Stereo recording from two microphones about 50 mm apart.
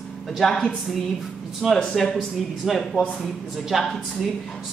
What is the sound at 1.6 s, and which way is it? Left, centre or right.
Speech, centre.